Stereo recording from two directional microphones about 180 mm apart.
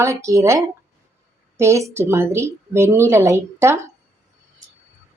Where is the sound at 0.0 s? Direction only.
15° right (ahead or behind).